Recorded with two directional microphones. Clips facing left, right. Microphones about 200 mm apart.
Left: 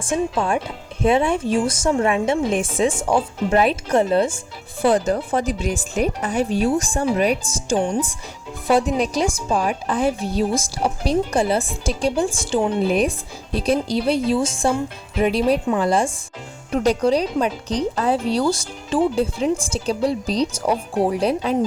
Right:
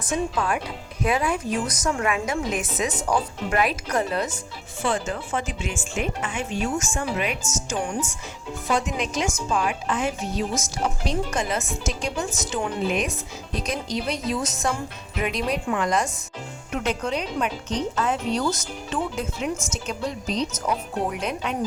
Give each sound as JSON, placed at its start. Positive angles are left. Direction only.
{"t": 0.0, "sound": "a woman's voice", "side_deg": 30}